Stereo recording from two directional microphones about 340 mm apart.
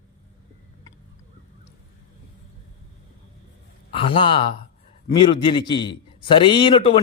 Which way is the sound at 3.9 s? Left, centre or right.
Centre.